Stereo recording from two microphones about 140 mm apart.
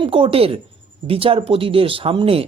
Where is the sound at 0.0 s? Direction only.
40° right (ahead or behind).